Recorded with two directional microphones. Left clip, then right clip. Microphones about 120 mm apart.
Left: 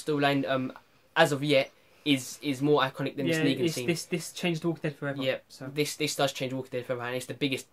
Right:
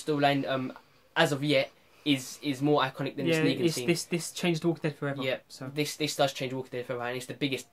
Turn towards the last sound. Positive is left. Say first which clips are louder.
# left 2 dB
turn(degrees=40)  # may be behind; listen again after turning